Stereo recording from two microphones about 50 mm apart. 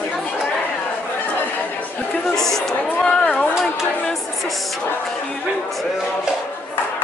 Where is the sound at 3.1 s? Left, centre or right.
Left.